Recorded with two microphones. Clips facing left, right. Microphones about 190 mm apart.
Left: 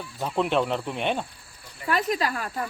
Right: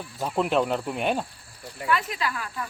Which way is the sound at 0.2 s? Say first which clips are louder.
Even; centre (ahead or behind).